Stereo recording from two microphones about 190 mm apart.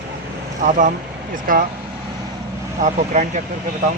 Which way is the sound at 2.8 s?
40° right (ahead or behind).